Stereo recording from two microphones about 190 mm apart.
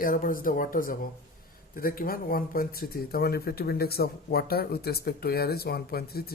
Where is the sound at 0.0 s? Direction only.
45° left (ahead or behind).